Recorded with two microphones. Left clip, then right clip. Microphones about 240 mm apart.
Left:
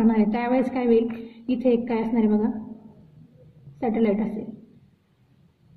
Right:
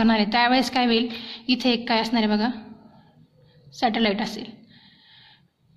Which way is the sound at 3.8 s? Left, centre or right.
Right.